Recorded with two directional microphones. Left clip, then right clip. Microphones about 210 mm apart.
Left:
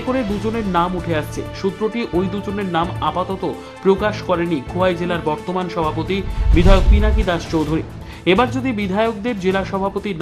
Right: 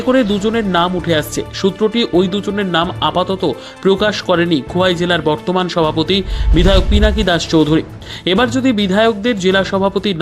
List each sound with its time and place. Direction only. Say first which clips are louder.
0.1 s speech: right 7 dB; 25° right (ahead or behind)